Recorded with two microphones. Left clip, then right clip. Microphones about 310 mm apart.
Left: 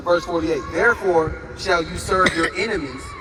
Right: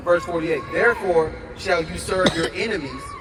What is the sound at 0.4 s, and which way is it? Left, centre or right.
A man's voice, left.